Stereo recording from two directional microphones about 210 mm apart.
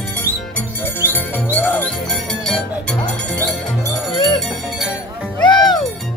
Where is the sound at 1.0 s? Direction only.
10° left (ahead or behind).